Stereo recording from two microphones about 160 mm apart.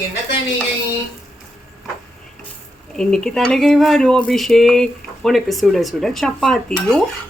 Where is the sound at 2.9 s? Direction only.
5° left (ahead or behind).